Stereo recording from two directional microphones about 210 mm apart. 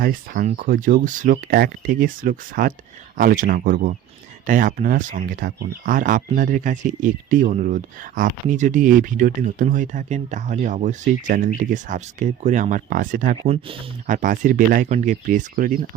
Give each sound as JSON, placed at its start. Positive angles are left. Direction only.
{"t": 0.0, "sound": "speech", "side_deg": -40}